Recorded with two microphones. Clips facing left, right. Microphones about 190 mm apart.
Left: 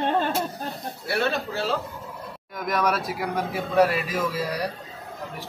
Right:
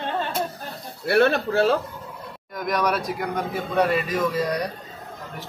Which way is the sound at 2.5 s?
Centre (ahead or behind).